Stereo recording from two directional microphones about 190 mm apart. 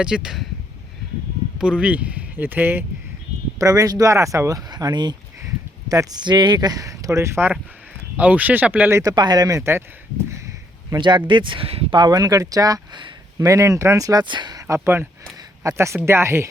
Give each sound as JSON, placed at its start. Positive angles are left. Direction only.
{"t": 0.0, "sound": "speech", "side_deg": -5}
{"t": 1.5, "sound": "speech", "side_deg": -5}
{"t": 10.2, "sound": "a sound", "side_deg": -15}
{"t": 11.3, "sound": "speech", "side_deg": -25}